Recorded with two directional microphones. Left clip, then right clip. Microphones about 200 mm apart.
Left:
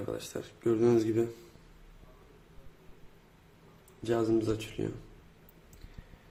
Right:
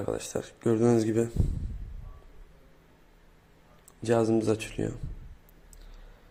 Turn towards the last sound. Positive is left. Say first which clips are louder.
# right 4 dB
turn(degrees=-25)  # may be behind; listen again after turning